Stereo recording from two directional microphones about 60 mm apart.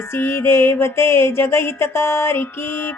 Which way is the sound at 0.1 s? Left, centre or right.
Left.